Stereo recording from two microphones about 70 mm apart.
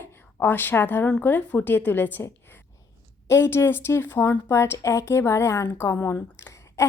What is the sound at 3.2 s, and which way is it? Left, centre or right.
Speech, left.